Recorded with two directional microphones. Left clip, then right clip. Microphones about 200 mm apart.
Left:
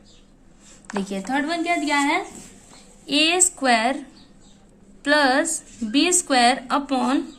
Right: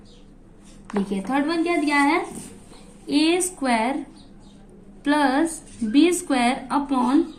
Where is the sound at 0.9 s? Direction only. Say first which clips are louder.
Even; 35° left (ahead or behind).